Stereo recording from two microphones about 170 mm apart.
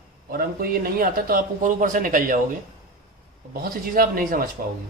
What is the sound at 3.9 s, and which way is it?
Speech, 55° right (ahead or behind).